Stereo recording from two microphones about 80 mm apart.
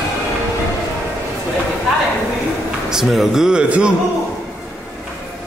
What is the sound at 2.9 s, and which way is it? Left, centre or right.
A man's voice, centre.